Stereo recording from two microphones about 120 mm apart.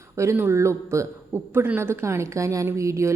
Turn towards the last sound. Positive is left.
turn(degrees=-25)  # may be behind; listen again after turning